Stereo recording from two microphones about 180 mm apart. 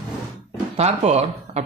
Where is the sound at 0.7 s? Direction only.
35° right (ahead or behind).